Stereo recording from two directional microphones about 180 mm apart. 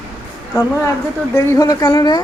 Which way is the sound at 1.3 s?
15° left (ahead or behind).